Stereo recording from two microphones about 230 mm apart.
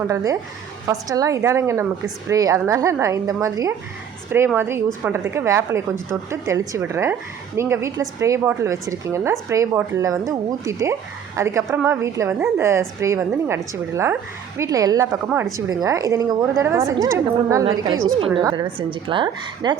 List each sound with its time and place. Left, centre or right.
0.1 s a woman's voice: centre
15.3 s a woman's voice: centre
15.5 s a woman's voice: centre